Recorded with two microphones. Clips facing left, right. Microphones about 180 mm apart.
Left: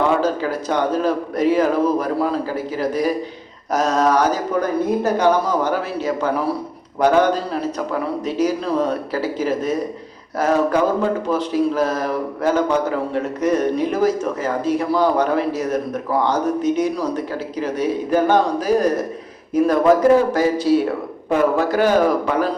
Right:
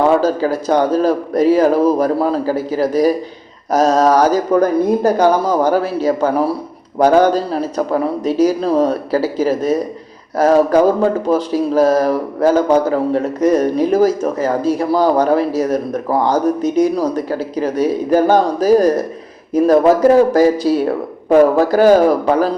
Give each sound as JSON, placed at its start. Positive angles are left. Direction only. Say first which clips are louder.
{"t": 0.2, "sound": "speech", "louder": "right 4 dB", "side_deg": -35}